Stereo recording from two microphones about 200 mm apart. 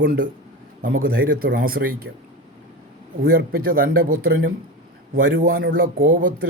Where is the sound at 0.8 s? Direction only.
45° right (ahead or behind).